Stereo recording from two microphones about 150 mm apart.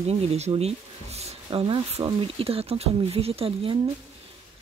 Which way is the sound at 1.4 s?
35° right (ahead or behind).